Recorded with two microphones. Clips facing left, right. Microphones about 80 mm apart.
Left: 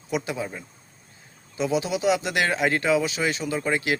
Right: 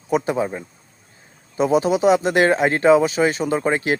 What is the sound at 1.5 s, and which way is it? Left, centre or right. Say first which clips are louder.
Speech: right 7 dB; right.